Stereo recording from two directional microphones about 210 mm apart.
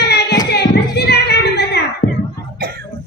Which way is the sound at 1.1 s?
50° left (ahead or behind).